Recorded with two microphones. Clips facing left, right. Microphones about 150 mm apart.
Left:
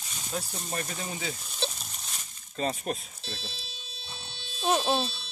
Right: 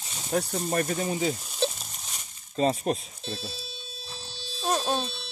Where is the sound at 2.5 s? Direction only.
30° right (ahead or behind).